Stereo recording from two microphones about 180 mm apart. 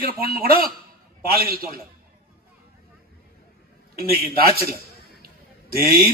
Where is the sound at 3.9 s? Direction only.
55° right (ahead or behind).